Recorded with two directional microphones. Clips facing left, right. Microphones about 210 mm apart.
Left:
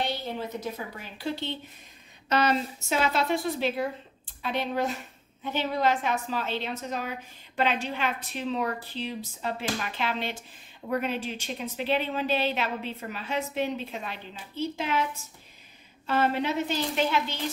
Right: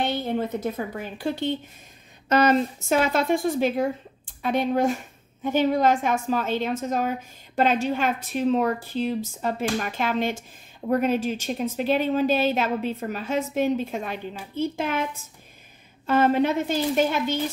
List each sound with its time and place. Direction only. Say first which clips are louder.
0.0 s a woman's voice: right 6 dB; 55° right (ahead or behind)
16.1 s a woman's voice: right 6 dB; 50° right (ahead or behind)